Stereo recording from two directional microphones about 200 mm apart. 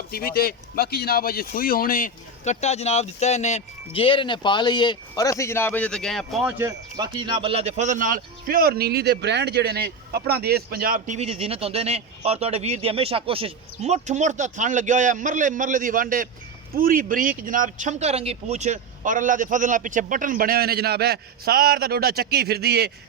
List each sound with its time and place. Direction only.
0.1 s speech: 50° left (ahead or behind); by 6.5 s centre (ahead or behind)
6.6 s speech: 20° right (ahead or behind); by 22.9 s 55° right (ahead or behind)